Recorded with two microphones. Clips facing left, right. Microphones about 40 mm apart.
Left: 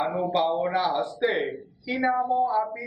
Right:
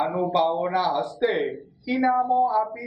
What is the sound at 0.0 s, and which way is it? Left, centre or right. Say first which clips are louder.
A man's voice: right 2 dB; centre.